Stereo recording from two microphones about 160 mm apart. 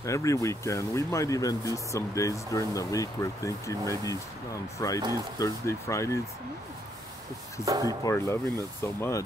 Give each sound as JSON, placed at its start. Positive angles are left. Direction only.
{"t": 0.0, "sound": "speech", "side_deg": 20}
{"t": 7.6, "sound": "speech", "side_deg": -20}
{"t": 8.0, "sound": "speech", "side_deg": 20}